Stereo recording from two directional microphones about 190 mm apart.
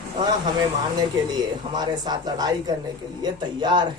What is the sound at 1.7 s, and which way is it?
A man's voice, 20° right (ahead or behind).